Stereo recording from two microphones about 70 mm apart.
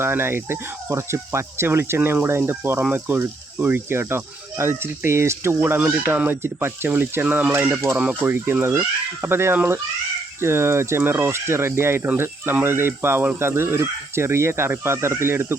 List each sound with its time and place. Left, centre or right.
0.0 s speech: right
7.3 s speech: centre
7.5 s speech: right